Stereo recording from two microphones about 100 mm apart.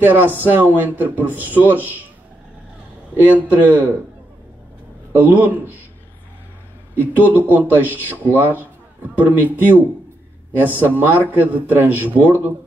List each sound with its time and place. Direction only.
0.0 s a man's voice: 20° right (ahead or behind)
3.3 s a man's voice: 20° right (ahead or behind)
5.1 s a man's voice: 20° right (ahead or behind)
7.0 s a man's voice: 20° right (ahead or behind)